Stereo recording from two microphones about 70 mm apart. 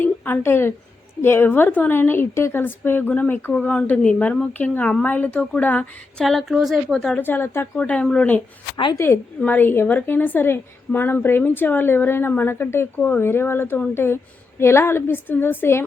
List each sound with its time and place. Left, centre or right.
0.0 s a sound: left
1.2 s a woman's voice: left
6.1 s a woman's voice: centre
7.2 s a woman's voice: left
7.8 s a woman's voice: centre
9.4 s a woman's voice: left